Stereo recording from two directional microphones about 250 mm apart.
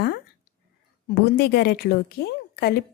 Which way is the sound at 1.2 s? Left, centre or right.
Left.